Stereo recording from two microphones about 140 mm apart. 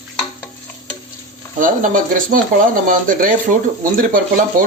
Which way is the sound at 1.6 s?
70° right (ahead or behind).